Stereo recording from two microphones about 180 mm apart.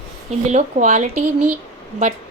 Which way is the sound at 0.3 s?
40° right (ahead or behind).